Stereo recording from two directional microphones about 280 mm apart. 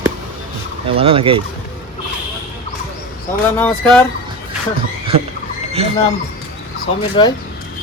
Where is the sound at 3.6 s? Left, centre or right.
Centre.